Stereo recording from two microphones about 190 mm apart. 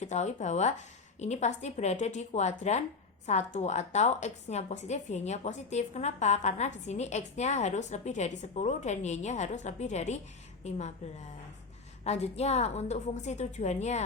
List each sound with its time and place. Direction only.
0.0 s a woman's voice: 35° left (ahead or behind)
12.0 s a woman's voice: 35° left (ahead or behind)